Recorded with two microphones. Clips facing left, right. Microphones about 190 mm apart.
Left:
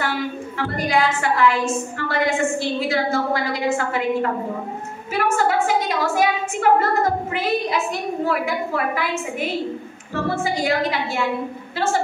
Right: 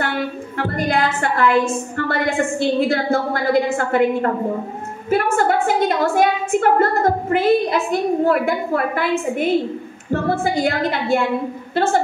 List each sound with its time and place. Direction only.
0.0 s a woman's voice: 55° right (ahead or behind)